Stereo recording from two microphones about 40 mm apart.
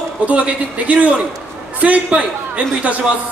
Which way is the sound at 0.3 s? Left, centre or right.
Right.